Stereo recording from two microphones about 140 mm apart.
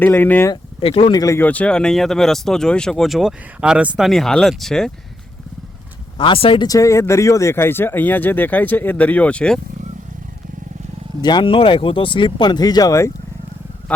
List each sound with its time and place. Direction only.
0.0 s speech: 15° left (ahead or behind)
0.5 s speech: 40° left (ahead or behind)
1.1 s speech: 25° left (ahead or behind)
1.4 s speech: 10° left (ahead or behind)
6.1 s speech: 40° left (ahead or behind)
6.7 s speech: 25° left (ahead or behind); by 9.6 s 10° left (ahead or behind)
11.2 s speech: 30° left (ahead or behind)